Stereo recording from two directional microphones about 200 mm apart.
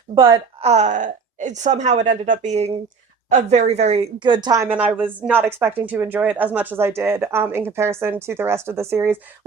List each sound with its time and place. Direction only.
0.1 s speech: 25° right (ahead or behind)